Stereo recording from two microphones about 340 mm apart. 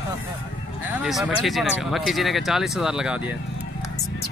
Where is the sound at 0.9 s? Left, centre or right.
Centre.